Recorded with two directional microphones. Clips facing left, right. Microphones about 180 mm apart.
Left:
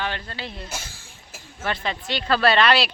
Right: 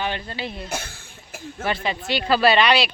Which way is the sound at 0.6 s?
60° right (ahead or behind).